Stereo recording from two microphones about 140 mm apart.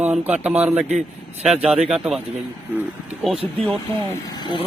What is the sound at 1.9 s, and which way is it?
Speech, 5° right (ahead or behind).